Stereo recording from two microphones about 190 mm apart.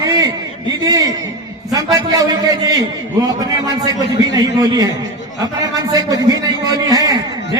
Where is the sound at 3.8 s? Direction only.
20° right (ahead or behind).